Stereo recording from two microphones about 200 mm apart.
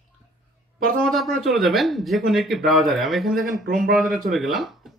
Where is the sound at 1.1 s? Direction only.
Centre (ahead or behind).